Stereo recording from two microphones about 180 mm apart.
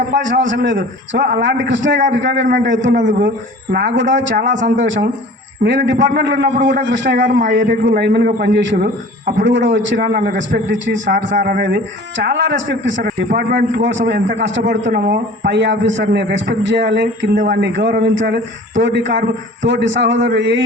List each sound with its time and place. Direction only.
0.2 s a man's voice: 90° right
3.2 s speech: 55° right (ahead or behind); by 4.9 s 85° right
5.6 s a man's voice: 75° right (ahead or behind)
10.1 s a man's voice: 50° right (ahead or behind)
10.3 s a man's voice: 90° right
11.3 s speech: 55° right (ahead or behind); by 13.1 s 80° right
13.1 s a man's voice: 65° right (ahead or behind)
14.4 s a man's voice: 85° right